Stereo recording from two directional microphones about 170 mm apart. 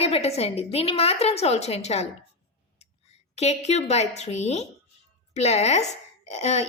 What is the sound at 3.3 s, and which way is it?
A woman's voice, 40° left (ahead or behind).